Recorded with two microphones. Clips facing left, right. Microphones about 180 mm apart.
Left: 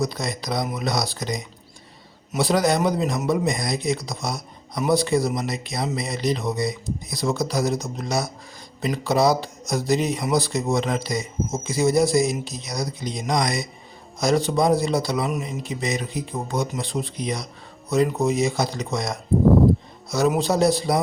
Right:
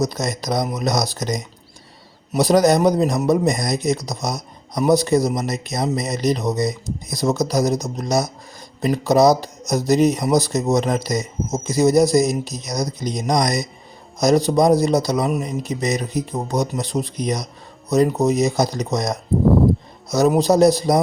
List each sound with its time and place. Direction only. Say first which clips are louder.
0.0 s a man's voice: right 4 dB; 45° right (ahead or behind)